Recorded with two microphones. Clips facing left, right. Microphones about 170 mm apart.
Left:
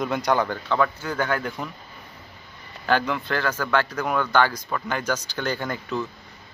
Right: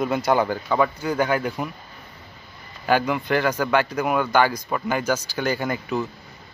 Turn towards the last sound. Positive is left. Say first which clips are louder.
# right 3 dB
turn(degrees=-10)  # may be behind; listen again after turning